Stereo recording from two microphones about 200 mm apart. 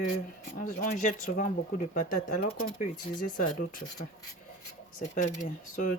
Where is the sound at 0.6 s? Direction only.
45° left (ahead or behind).